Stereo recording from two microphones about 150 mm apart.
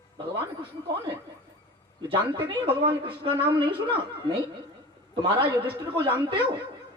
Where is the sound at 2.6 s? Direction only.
35° right (ahead or behind).